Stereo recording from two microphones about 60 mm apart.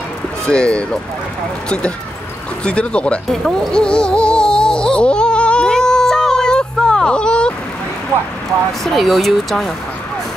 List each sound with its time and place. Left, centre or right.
0.5 s speech: centre
2.6 s speech: centre
3.3 s music: centre
8.8 s speech: centre